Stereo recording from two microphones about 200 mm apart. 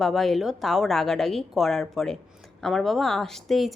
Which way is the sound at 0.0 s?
Centre (ahead or behind).